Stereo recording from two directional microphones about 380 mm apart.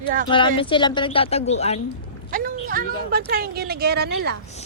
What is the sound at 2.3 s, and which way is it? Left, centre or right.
Speech, right.